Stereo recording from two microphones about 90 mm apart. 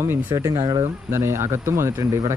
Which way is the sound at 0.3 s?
40° right (ahead or behind).